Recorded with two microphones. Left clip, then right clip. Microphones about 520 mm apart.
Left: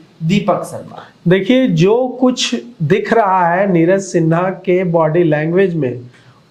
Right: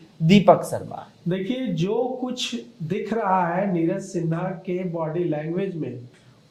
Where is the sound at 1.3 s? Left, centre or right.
Left.